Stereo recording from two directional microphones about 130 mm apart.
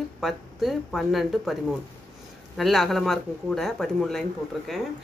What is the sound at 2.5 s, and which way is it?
Speech, centre (ahead or behind).